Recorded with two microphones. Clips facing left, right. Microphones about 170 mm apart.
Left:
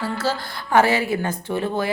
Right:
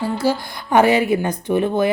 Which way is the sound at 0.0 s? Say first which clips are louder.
Right 5 dB; 15° right (ahead or behind).